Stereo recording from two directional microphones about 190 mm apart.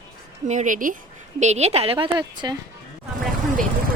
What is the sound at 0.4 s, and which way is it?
A woman's voice, 40° right (ahead or behind).